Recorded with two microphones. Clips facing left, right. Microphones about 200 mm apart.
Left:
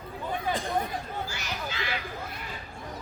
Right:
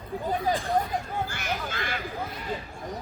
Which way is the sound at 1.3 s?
55° right (ahead or behind).